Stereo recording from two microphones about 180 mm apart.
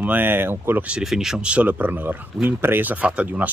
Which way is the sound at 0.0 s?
10° right (ahead or behind).